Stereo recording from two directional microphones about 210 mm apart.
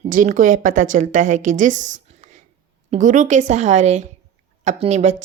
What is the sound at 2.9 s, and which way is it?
A woman's voice, 35° right (ahead or behind).